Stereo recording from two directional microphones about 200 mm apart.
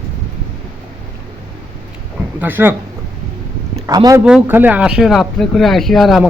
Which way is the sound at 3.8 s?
20° right (ahead or behind).